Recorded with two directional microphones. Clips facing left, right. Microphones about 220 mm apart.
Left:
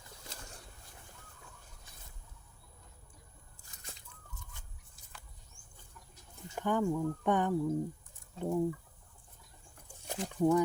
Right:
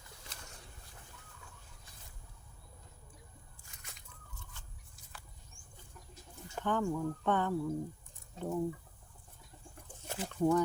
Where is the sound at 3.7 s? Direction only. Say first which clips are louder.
Left 5 dB; 30° left (ahead or behind).